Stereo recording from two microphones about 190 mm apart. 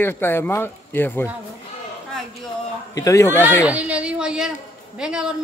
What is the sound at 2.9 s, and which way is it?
Speech, 15° left (ahead or behind).